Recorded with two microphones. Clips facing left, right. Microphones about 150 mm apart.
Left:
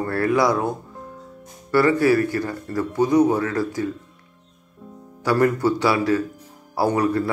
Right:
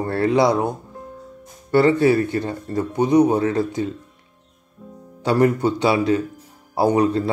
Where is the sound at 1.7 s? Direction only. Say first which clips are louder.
Right 2 dB; 25° right (ahead or behind).